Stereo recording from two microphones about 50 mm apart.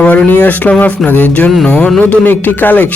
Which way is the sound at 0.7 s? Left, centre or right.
Left.